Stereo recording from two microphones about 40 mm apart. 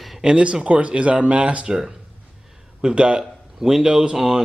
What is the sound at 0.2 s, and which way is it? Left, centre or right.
Speech, right.